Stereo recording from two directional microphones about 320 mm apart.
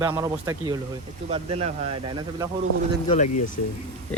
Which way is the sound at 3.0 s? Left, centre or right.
Centre.